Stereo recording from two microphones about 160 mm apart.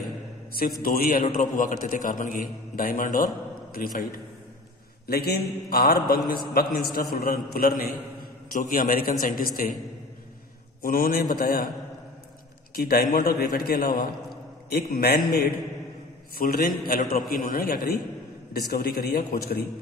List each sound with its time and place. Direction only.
0.6 s a man's voice: 65° left (ahead or behind)
5.0 s a man's voice: 80° left; by 9.7 s 60° left (ahead or behind)
10.8 s a man's voice: 65° left (ahead or behind)
12.7 s a man's voice: 70° left (ahead or behind)
14.7 s a man's voice: 85° left
16.3 s a man's voice: 65° left (ahead or behind)
18.5 s a man's voice: 75° left (ahead or behind)